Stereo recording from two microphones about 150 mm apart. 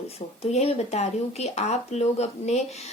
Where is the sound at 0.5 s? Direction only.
45° left (ahead or behind).